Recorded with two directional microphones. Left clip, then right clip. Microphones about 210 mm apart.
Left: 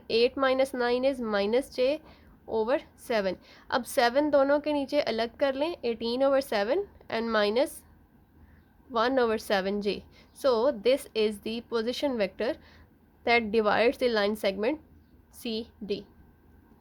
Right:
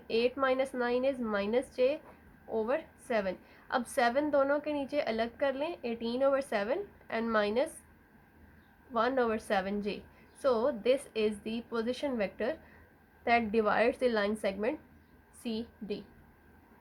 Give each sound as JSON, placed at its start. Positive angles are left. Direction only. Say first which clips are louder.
{"t": 0.1, "sound": "a woman's voice", "louder": "left 5 dB", "side_deg": 50}
{"t": 8.9, "sound": "a woman's voice", "louder": "left 4 dB", "side_deg": 50}